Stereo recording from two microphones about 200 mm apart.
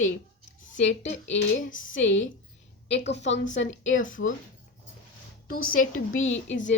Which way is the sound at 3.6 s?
70° left (ahead or behind).